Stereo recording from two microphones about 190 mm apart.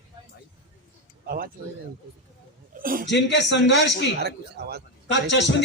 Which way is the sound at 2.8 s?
50° right (ahead or behind).